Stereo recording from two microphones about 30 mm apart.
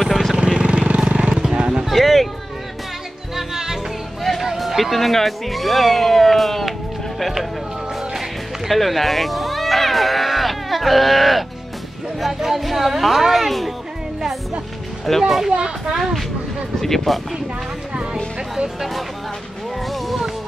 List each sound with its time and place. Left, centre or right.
0.0 s vehicle: centre
0.5 s vehicle: right
1.9 s a sound: centre
3.5 s music: centre
4.4 s music: centre
4.9 s speech: centre
8.6 s a sound: centre
12.2 s speech: centre
15.2 s speech: centre
19.9 s speech: centre